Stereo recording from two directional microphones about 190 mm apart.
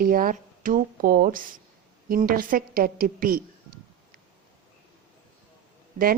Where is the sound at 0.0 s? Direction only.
50° right (ahead or behind).